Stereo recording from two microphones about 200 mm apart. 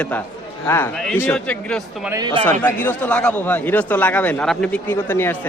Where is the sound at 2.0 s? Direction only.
20° right (ahead or behind).